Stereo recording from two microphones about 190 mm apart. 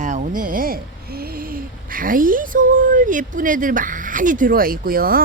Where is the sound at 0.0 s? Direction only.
45° right (ahead or behind).